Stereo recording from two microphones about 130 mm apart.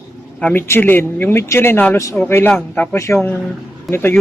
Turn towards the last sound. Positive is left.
turn(degrees=15)  # may be behind; listen again after turning